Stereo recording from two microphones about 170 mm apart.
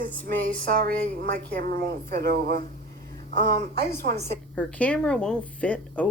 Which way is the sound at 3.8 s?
75° right (ahead or behind).